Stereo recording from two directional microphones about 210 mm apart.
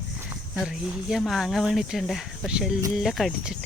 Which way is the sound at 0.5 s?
Centre (ahead or behind).